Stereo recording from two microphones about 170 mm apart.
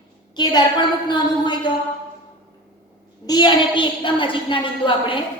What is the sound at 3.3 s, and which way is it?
A woman's voice, 25° left (ahead or behind).